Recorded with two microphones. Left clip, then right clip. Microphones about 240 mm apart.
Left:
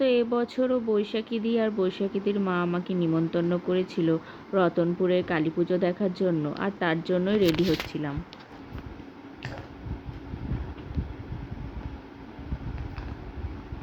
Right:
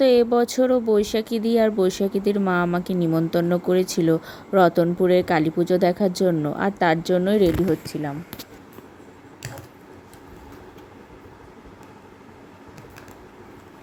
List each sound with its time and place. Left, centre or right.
0.0 s speech: right